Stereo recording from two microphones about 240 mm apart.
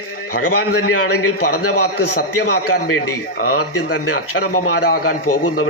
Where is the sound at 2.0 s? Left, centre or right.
Left.